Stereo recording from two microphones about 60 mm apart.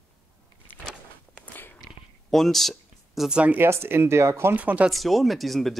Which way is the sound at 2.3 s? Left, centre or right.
Centre.